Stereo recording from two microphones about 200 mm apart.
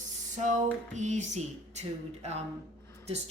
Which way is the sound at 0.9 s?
35° right (ahead or behind).